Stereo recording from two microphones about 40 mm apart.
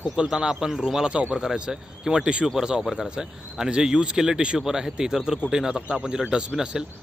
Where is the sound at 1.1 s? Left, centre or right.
Right.